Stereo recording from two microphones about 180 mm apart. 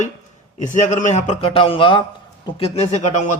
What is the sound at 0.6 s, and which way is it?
A man's voice, 45° left (ahead or behind).